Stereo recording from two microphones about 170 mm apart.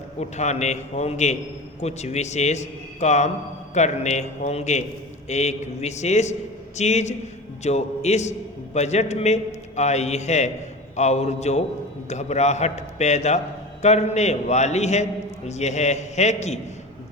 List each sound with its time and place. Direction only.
0.2 s a man's voice: 40° left (ahead or behind)